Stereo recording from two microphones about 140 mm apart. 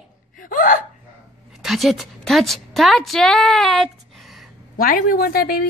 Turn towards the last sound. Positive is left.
turn(degrees=90)